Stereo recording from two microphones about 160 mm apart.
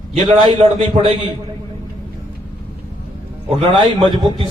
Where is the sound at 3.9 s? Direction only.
35° right (ahead or behind).